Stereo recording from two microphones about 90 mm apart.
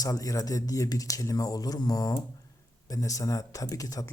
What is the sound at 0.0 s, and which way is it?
Speech, 40° left (ahead or behind).